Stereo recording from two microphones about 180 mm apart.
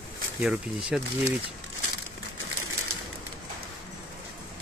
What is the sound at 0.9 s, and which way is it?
Speech, 5° right (ahead or behind).